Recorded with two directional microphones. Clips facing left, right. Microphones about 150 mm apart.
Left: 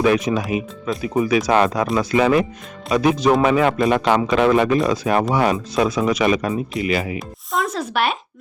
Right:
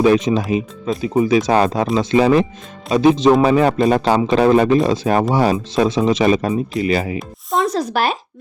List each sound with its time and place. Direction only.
0.0 s speech: 25° right (ahead or behind)
3.4 s speech: 35° right (ahead or behind)